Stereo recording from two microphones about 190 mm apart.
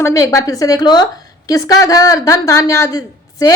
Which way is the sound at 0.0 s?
15° left (ahead or behind).